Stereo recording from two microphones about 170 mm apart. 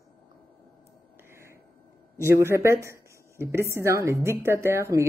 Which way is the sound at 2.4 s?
15° right (ahead or behind).